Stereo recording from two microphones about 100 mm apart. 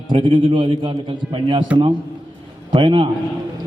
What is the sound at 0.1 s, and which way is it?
A man's voice, 55° right (ahead or behind).